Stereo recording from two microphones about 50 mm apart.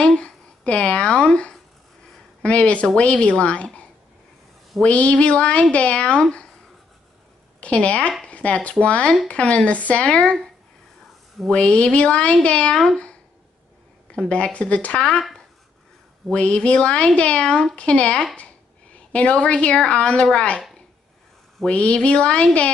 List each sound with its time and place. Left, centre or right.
0.1 s a woman's voice: left
4.8 s speech: left
7.6 s speech: left
11.5 s speech: left
14.3 s speech: left
16.3 s speech: left
21.6 s speech: left